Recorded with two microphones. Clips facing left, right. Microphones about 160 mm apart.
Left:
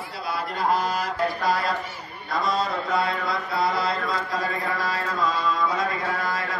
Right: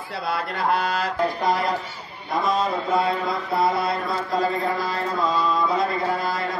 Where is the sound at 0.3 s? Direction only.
60° right (ahead or behind).